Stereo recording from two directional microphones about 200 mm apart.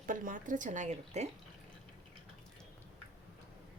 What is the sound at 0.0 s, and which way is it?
Speech, 40° right (ahead or behind).